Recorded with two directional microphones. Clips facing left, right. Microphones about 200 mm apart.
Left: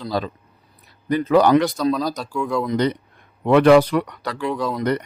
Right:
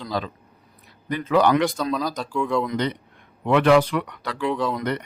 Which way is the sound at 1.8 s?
10° left (ahead or behind).